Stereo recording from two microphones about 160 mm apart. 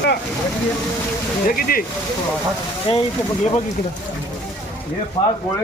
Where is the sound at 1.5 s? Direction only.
65° left (ahead or behind).